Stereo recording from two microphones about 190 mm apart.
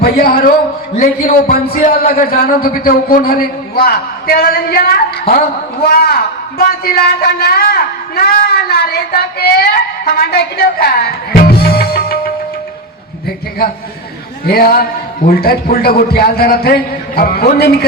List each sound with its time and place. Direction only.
0.0 s a man's voice: 50° left (ahead or behind)
14.4 s a man's voice: 55° left (ahead or behind)